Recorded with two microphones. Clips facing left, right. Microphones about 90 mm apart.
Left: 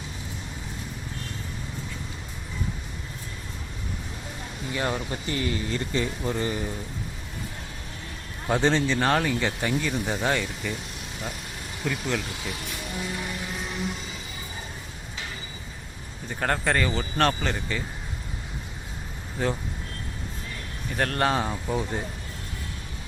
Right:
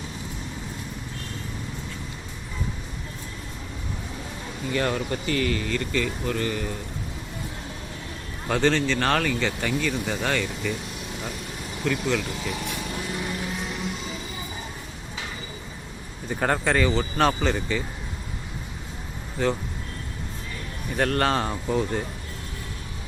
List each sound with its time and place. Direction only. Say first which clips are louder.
4.7 s speech: right 3 dB; 15° left (ahead or behind)
8.4 s speech: right 1 dB; 15° left (ahead or behind)
11.9 s speech: right 4 dB; 5° left (ahead or behind)
16.3 s speech: right 2 dB; 5° right (ahead or behind)
19.4 s speech: right 3 dB; 5° left (ahead or behind)
20.9 s speech: right 2 dB; centre (ahead or behind)